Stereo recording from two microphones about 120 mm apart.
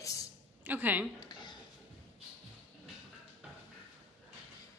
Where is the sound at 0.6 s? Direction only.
15° right (ahead or behind).